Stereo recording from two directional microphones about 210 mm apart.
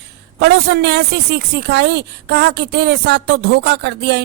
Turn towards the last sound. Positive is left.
turn(degrees=-55)  # may be behind; listen again after turning